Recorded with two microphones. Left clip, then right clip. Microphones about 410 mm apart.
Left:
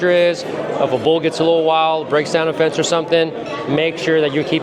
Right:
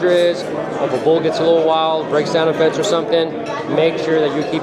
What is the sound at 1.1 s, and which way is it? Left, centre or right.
Speech, left.